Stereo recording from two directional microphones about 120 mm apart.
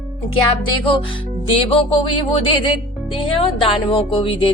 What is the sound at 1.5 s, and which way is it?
Speech, 50° left (ahead or behind).